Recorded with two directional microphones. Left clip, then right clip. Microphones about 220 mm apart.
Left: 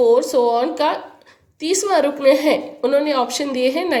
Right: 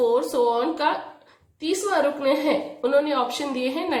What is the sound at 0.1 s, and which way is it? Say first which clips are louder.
A woman's voice: left 6 dB; 25° left (ahead or behind).